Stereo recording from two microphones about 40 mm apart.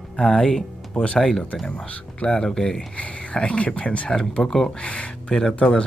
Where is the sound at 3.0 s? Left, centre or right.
Left.